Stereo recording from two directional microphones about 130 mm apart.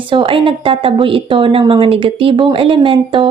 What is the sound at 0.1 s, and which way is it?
A woman's voice, 40° right (ahead or behind).